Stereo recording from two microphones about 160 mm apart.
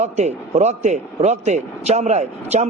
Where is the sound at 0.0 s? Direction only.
45° right (ahead or behind).